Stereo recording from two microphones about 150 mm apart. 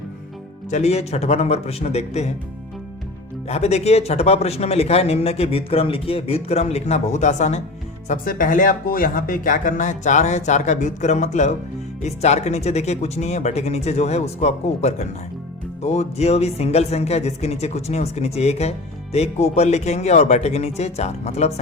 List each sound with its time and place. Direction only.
0.7 s speech: 45° left (ahead or behind)
3.4 s speech: 45° left (ahead or behind)
8.0 s speech: 60° left (ahead or behind); by 21.5 s 45° left (ahead or behind)